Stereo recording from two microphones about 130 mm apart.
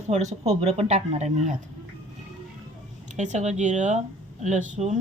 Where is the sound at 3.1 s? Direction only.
65° right (ahead or behind).